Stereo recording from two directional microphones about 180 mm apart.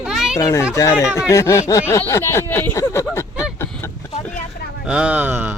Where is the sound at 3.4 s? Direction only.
15° left (ahead or behind).